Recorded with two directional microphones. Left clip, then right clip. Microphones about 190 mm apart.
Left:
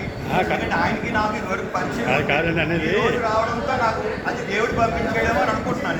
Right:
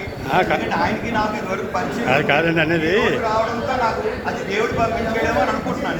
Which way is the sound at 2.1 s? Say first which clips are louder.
Right 4 dB; 40° right (ahead or behind).